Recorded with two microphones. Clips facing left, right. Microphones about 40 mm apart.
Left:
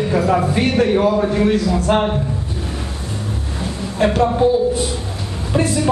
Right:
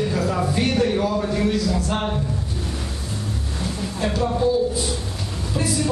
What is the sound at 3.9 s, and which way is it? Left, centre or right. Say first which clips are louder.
Speech: left 9 dB; left.